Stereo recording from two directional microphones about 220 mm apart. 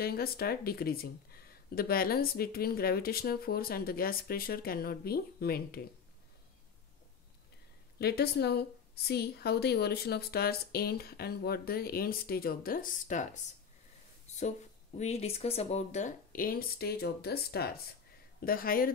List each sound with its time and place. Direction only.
0.0 s speech: 45° left (ahead or behind)
8.0 s speech: 45° left (ahead or behind)
14.2 s a sound: 30° left (ahead or behind)
15.0 s speech: 30° left (ahead or behind)